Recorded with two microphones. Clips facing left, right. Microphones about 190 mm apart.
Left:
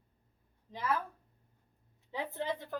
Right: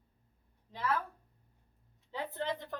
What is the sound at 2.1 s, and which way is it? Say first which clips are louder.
Speech: even; 10° left (ahead or behind).